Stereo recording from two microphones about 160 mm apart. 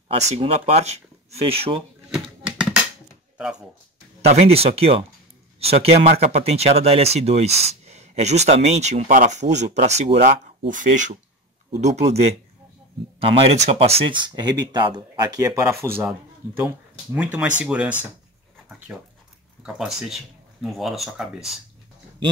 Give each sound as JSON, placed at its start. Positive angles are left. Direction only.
{"t": 0.2, "sound": "speech", "side_deg": -45}
{"t": 2.1, "sound": "a sound", "side_deg": -5}
{"t": 3.3, "sound": "speech", "side_deg": -5}
{"t": 4.2, "sound": "speech", "side_deg": -40}
{"t": 10.7, "sound": "speech", "side_deg": -50}